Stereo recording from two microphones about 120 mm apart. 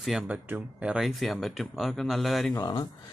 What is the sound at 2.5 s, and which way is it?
Speech, 30° left (ahead or behind).